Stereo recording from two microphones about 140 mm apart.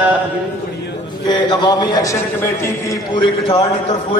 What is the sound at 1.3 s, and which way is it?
Speech, 30° left (ahead or behind).